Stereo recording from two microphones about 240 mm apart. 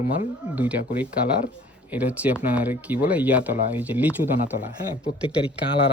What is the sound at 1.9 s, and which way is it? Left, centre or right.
Speech, centre.